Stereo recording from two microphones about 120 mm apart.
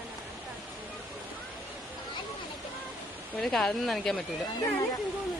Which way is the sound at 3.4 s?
5° left (ahead or behind).